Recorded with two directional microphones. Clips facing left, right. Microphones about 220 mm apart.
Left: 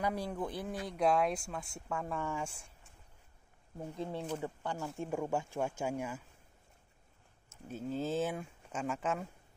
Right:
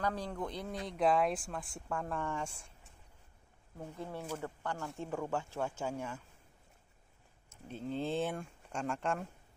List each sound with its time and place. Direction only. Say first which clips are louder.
0.0 s speech: left 1 dB; 10° left (ahead or behind)
3.7 s speech: left 3 dB; 15° left (ahead or behind)
7.6 s speech: left 1 dB; 5° left (ahead or behind)